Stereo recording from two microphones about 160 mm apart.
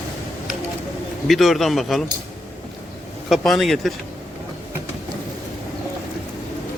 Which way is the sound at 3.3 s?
Centre (ahead or behind).